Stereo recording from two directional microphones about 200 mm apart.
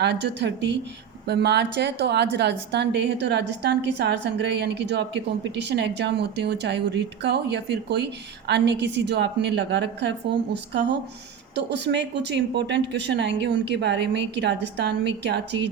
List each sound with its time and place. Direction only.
0.0 s a woman's voice: 60° right (ahead or behind)